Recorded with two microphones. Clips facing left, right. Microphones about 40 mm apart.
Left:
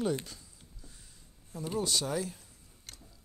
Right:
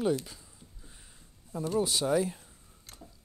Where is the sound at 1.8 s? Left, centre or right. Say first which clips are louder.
Right 5 dB; centre.